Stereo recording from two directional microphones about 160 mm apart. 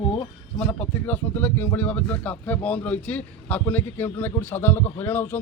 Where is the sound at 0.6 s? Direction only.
10° left (ahead or behind).